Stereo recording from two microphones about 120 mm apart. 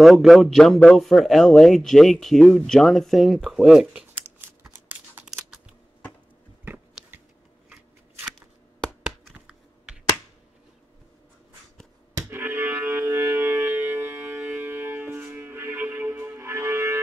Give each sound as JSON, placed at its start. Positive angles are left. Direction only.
{"t": 0.0, "sound": "a man's voice", "side_deg": 0}
{"t": 6.6, "sound": "chewing", "side_deg": -15}
{"t": 12.3, "sound": "music", "side_deg": -20}